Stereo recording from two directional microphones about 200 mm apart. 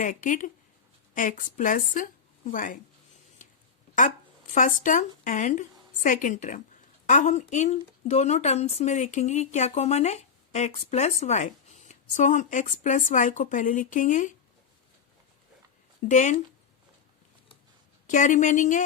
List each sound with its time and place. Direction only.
0.0 s a woman's voice: 40° left (ahead or behind)
4.5 s speech: 40° left (ahead or behind)
16.0 s speech: 35° left (ahead or behind)
18.0 s speech: 40° left (ahead or behind)